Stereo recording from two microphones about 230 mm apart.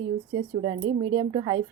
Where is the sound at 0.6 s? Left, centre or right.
Right.